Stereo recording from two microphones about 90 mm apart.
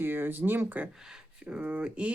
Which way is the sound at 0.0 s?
25° right (ahead or behind).